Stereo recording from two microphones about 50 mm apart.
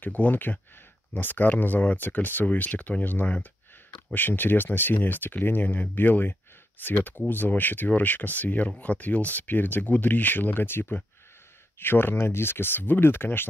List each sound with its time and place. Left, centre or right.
0.0 s speech: left